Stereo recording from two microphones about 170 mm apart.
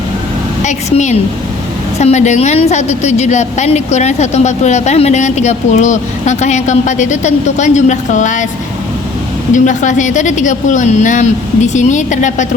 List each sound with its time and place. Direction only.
0.6 s a woman's voice: 45° left (ahead or behind)
9.5 s a woman's voice: 45° left (ahead or behind)